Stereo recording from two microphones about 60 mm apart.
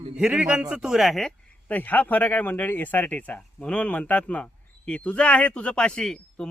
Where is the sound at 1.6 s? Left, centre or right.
Left.